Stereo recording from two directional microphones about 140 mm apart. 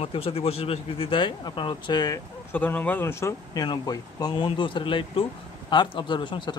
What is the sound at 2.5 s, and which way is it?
Speech, 15° left (ahead or behind).